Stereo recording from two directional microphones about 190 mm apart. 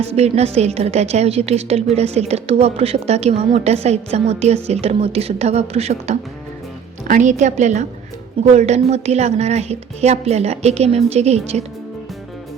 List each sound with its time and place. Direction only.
0.2 s a woman's voice: 35° right (ahead or behind)